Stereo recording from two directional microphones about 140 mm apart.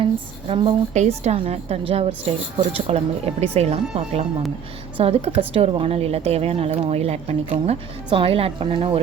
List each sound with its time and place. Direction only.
0.0 s a woman's voice: 40° right (ahead or behind)
0.9 s a woman's voice: 55° right (ahead or behind)